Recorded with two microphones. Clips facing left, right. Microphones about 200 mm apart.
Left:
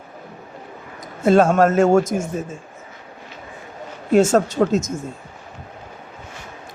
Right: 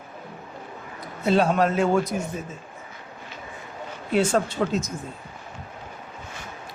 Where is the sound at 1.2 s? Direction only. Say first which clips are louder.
Left 6 dB; 45° left (ahead or behind).